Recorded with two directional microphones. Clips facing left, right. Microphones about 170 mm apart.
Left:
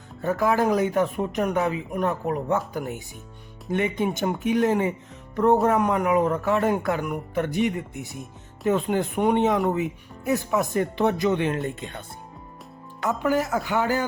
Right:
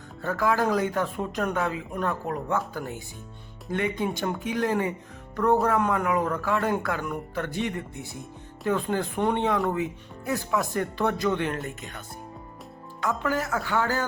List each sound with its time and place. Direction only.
0.2 s speech: 20° left (ahead or behind)